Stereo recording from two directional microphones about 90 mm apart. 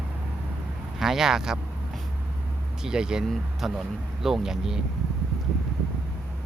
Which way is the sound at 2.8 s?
10° right (ahead or behind).